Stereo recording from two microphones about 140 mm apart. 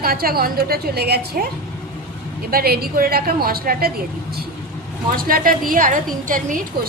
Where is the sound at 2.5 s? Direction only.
90° right.